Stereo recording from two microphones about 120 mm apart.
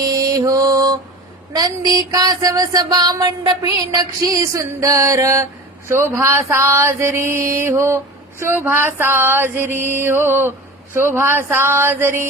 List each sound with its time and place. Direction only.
0.0 s mantra: 30° right (ahead or behind)
1.5 s a sound: 35° right (ahead or behind)
5.9 s mantra: 20° right (ahead or behind)